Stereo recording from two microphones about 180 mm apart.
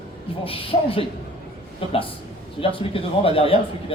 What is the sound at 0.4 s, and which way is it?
A man's voice, 30° left (ahead or behind).